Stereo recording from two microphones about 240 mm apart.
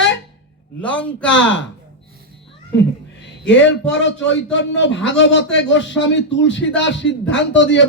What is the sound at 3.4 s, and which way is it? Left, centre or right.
A man's voice, left.